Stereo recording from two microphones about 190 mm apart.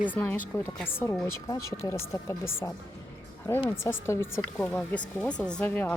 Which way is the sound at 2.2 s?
15° left (ahead or behind).